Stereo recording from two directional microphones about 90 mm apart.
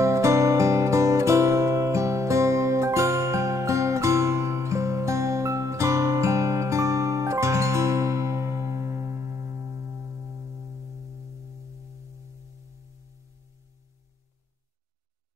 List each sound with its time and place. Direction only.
0.0 s music: 35° right (ahead or behind)